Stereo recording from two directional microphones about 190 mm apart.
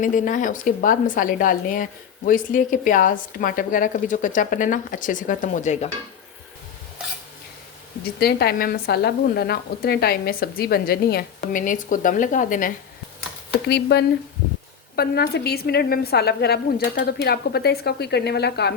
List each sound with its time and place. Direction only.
0.0 s speech: 45° left (ahead or behind)
8.2 s speech: 55° left (ahead or behind)
13.7 s a woman's voice: 60° left (ahead or behind)